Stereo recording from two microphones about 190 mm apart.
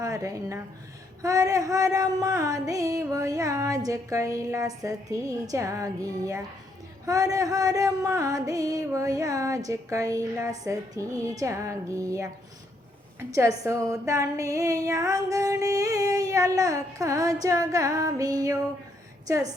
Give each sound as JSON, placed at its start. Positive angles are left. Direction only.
{"t": 0.0, "sound": "a woman's voice", "side_deg": -15}